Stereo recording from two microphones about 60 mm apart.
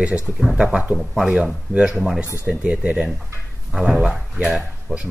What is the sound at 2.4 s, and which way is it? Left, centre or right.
Speech, right.